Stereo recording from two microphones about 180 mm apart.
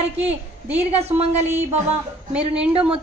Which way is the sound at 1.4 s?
10° right (ahead or behind).